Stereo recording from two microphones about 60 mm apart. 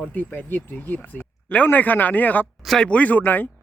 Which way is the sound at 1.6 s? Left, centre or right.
Left.